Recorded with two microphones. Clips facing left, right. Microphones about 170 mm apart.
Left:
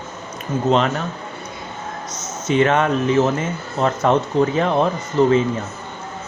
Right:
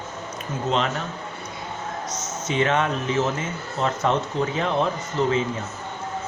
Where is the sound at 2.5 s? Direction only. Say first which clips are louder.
Left 6 dB; 50° left (ahead or behind).